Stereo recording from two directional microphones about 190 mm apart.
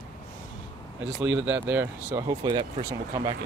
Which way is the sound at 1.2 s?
10° right (ahead or behind).